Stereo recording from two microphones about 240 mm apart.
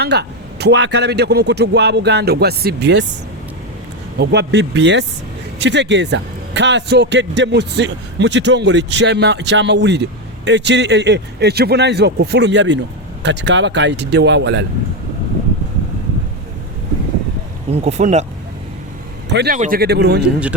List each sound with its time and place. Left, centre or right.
0.0 s speech: right
4.2 s speech: right
17.7 s speech: right
19.3 s a man's voice: right